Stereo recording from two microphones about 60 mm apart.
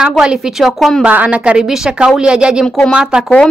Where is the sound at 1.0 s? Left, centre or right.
Right.